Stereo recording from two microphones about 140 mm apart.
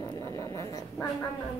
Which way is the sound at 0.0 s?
25° left (ahead or behind).